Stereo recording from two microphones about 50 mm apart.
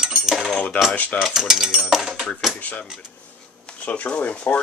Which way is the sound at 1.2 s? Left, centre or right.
Centre.